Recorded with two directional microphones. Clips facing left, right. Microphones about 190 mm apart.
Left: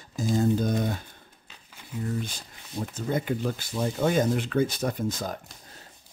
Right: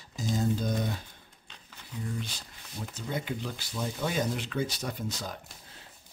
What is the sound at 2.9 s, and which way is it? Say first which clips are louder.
Speech: left 6 dB; 50° left (ahead or behind).